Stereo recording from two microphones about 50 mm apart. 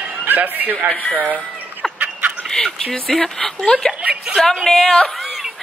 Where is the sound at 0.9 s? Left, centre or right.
Left.